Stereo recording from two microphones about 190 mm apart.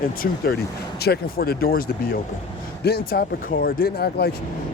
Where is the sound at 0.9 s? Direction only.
55° left (ahead or behind).